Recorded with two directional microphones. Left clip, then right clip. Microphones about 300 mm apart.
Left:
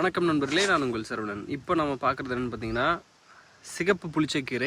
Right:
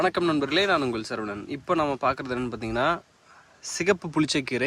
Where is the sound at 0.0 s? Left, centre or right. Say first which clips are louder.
Right 2 dB; centre.